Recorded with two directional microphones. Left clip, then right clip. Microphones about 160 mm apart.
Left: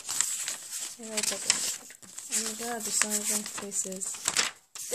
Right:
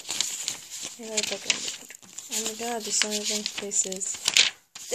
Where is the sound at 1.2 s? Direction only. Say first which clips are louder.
Right 1 dB; 20° left (ahead or behind).